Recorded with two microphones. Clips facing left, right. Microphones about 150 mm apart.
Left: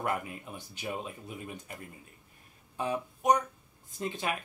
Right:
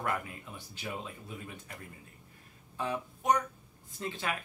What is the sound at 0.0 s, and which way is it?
Speech, 20° left (ahead or behind).